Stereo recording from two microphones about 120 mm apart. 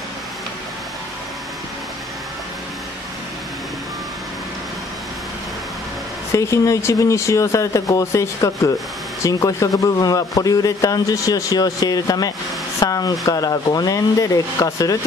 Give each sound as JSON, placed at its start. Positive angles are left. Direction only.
{"t": 6.3, "sound": "a man's voice", "side_deg": 25}